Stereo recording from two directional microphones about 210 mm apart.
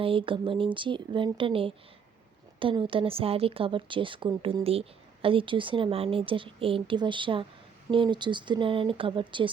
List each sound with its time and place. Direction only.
0.0 s speech: 25° right (ahead or behind)